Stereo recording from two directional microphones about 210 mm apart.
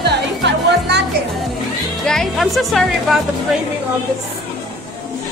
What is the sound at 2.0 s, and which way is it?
A woman's voice, centre (ahead or behind).